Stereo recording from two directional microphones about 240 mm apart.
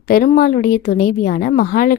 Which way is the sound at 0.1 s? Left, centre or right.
Left.